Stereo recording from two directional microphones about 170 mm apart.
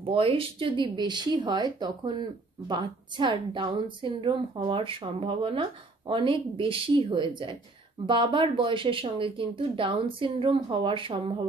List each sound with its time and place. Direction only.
0.0 s a woman's voice: 35° right (ahead or behind)